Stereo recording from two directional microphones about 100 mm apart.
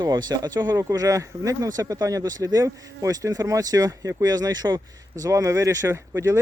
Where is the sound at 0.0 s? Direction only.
45° right (ahead or behind).